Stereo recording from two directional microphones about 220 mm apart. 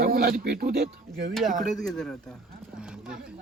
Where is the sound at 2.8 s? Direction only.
5° right (ahead or behind).